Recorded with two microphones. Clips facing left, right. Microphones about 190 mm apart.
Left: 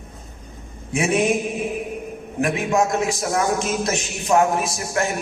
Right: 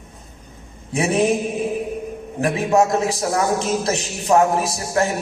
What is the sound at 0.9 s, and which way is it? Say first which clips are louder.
Speech: right 1 dB; 35° right (ahead or behind).